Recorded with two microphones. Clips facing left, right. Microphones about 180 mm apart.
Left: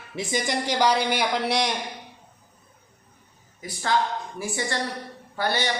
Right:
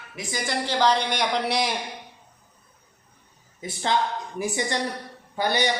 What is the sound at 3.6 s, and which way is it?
A woman's voice, 25° right (ahead or behind).